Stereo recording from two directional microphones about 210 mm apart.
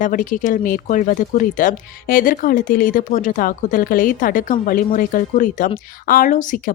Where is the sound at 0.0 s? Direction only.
40° left (ahead or behind).